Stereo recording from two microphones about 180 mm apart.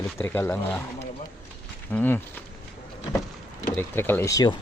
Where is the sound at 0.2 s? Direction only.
10° left (ahead or behind).